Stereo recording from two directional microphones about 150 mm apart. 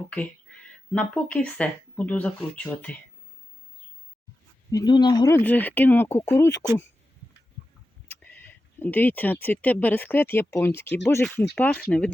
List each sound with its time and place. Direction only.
0.9 s speech: 10° left (ahead or behind)
4.7 s speech: 25° left (ahead or behind)
5.4 s speech: 10° left (ahead or behind)
8.1 s speech: 10° left (ahead or behind)